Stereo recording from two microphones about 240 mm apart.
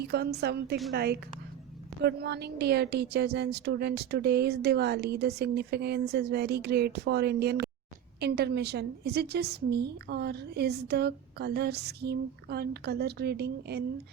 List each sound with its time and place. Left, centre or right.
0.0 s a woman's voice: right